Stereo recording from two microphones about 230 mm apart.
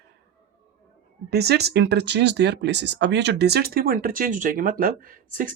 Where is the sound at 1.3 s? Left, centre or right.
Right.